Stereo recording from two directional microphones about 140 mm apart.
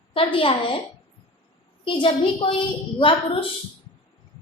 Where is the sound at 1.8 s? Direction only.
35° left (ahead or behind).